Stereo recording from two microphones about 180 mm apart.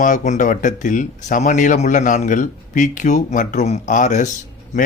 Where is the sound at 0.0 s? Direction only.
45° left (ahead or behind).